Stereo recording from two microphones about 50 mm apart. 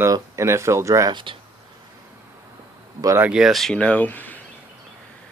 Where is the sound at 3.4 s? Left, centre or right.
Centre.